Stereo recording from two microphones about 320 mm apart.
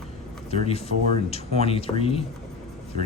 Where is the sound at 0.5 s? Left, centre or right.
Centre.